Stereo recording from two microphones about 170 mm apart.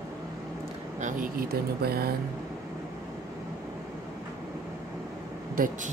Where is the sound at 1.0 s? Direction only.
55° right (ahead or behind).